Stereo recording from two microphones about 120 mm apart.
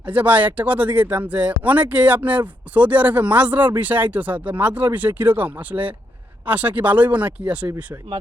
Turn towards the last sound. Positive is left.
turn(degrees=-10)  # may be behind; listen again after turning